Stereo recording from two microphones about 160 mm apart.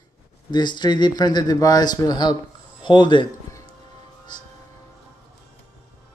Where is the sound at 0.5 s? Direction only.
25° left (ahead or behind).